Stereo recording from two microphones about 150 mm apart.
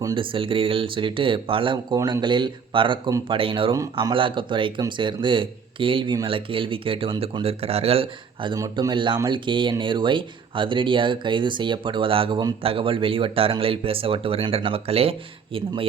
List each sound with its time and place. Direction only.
0.0 s speech: 30° right (ahead or behind)
8.5 s speech: 20° right (ahead or behind)